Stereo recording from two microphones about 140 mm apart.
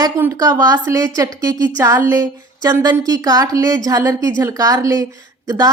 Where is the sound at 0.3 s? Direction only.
25° right (ahead or behind).